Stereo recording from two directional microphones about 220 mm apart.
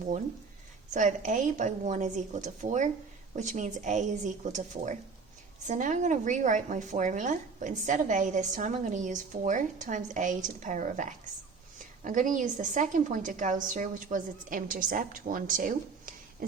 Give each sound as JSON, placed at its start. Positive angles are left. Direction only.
{"t": 0.9, "sound": "a woman's voice", "side_deg": -35}